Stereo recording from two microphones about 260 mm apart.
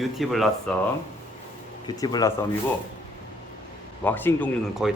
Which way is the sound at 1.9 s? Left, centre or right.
Centre.